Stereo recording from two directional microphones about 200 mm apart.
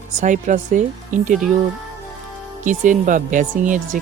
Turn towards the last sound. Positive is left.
turn(degrees=-40)  # may be behind; listen again after turning